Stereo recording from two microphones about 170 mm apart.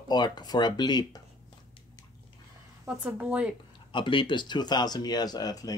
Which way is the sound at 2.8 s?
10° right (ahead or behind).